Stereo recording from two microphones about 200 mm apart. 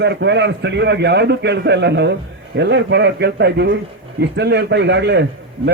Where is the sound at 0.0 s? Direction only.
60° right (ahead or behind).